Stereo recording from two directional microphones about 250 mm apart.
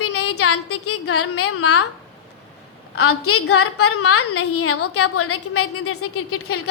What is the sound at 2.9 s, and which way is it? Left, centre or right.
A woman's voice, left.